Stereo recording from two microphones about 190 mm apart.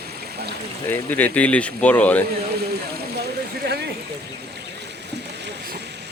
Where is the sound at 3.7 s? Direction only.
60° right (ahead or behind).